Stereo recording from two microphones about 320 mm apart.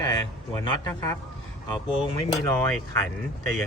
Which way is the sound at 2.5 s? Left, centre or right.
Centre.